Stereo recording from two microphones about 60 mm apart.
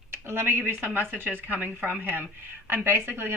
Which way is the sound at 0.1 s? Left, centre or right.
Right.